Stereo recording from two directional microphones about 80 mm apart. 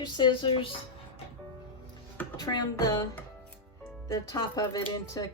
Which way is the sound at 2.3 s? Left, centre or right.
Left.